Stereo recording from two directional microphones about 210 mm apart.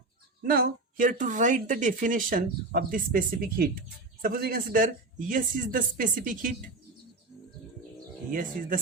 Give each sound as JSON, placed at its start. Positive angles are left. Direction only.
{"t": 0.4, "sound": "speech", "side_deg": -45}
{"t": 8.3, "sound": "speech", "side_deg": -40}